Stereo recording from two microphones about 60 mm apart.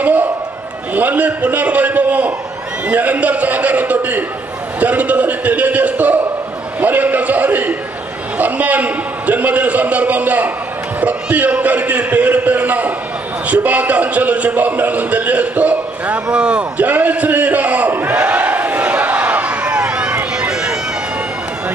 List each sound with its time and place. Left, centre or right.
0.0 s a sound: right
0.9 s a man's voice: right
20.5 s run: centre